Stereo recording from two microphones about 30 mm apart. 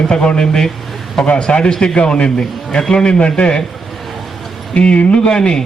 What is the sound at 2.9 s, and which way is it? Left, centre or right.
Speech, left.